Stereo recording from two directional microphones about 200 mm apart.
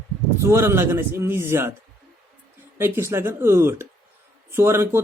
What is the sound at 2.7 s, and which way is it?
Speech, 10° right (ahead or behind).